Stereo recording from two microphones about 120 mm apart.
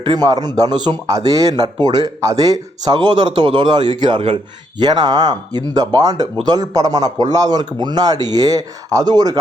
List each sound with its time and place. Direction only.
0.0 s a man's voice: 35° right (ahead or behind)